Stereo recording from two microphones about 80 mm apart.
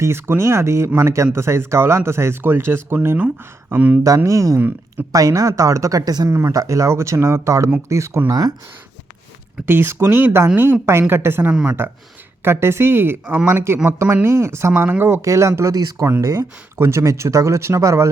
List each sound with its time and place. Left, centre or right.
0.0 s speech: right
4.0 s speech: right
6.2 s speech: right
8.3 s speech: right
9.6 s speech: right
14.7 s speech: right
16.0 s speech: right